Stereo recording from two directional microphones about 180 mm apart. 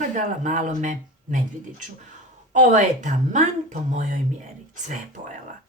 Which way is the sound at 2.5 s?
45° right (ahead or behind).